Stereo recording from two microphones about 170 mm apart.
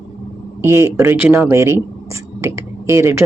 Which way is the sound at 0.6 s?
15° right (ahead or behind).